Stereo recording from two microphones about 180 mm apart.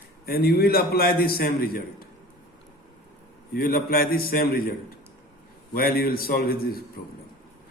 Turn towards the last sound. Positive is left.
turn(degrees=55)  # may be behind; listen again after turning